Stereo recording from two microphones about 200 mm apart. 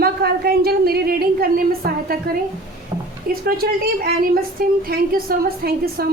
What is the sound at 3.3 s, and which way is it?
A woman's voice, 50° right (ahead or behind).